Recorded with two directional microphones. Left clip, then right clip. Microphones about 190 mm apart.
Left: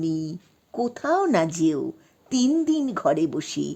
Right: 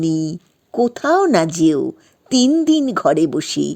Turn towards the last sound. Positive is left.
turn(degrees=-30)  # may be behind; listen again after turning